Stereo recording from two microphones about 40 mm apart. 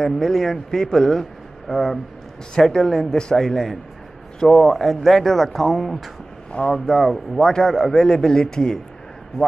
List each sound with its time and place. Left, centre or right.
0.0 s a man's voice: centre
7.4 s a man's voice: centre